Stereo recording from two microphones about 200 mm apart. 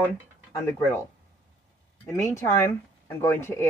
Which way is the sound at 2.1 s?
15° left (ahead or behind).